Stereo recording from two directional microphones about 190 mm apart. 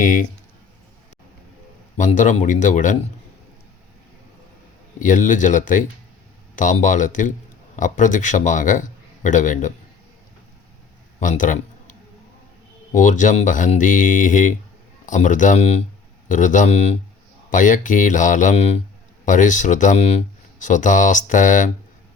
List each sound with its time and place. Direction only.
0.0 s speech: 45° left (ahead or behind)
2.0 s speech: 40° left (ahead or behind)
4.9 s speech: 45° left (ahead or behind)
11.2 s a sound: 45° left (ahead or behind)
12.9 s speech: 40° left (ahead or behind)